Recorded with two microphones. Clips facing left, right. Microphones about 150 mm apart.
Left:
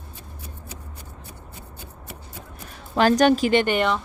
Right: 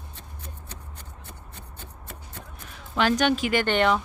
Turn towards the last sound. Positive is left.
turn(degrees=5)  # may be behind; listen again after turning